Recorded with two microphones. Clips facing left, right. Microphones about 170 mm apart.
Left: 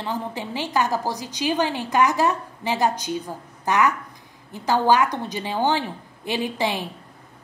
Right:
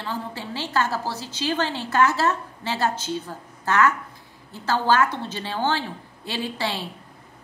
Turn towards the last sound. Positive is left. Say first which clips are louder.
# left 3 dB
turn(degrees=15)  # may be behind; listen again after turning